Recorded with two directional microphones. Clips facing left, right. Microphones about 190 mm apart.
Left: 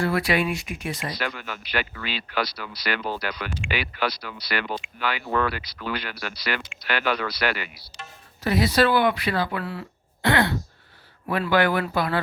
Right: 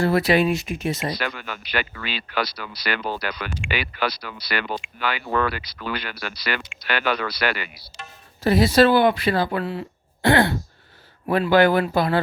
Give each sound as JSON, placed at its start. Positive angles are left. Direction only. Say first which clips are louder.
{"t": 0.0, "sound": "speech", "louder": "right 5 dB", "side_deg": -25}
{"t": 1.2, "sound": "speech", "louder": "right 1 dB", "side_deg": -85}
{"t": 8.4, "sound": "speech", "louder": "right 5 dB", "side_deg": -30}